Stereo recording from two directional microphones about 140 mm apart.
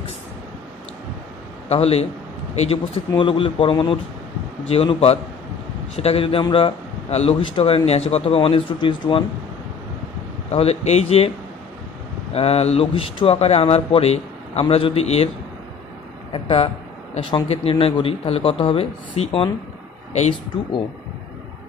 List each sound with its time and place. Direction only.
1.7 s a man's voice: 45° left (ahead or behind)
10.5 s a man's voice: 45° left (ahead or behind)
12.4 s a man's voice: 45° left (ahead or behind)
16.3 s a man's voice: 40° left (ahead or behind)